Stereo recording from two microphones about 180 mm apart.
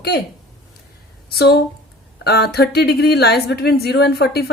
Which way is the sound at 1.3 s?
60° left (ahead or behind).